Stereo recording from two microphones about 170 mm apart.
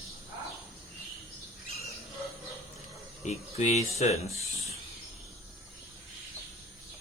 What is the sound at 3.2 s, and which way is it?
Speech, 40° left (ahead or behind).